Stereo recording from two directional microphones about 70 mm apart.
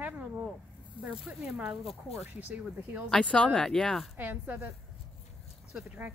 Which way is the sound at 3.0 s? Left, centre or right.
Centre.